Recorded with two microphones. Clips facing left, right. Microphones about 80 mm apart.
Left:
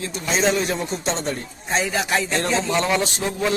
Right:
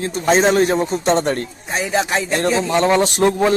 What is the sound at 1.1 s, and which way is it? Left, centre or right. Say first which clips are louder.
Speech: right 9 dB; right.